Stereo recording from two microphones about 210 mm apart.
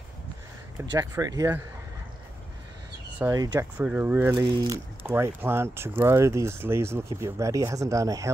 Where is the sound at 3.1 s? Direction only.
15° right (ahead or behind).